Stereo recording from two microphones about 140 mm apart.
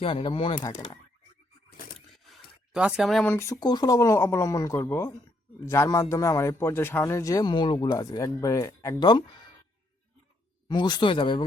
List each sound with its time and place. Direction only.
0.0 s speech: 40° left (ahead or behind)
2.0 s a sound: centre (ahead or behind)
3.2 s a man's voice: 20° left (ahead or behind)
10.7 s speech: 30° left (ahead or behind)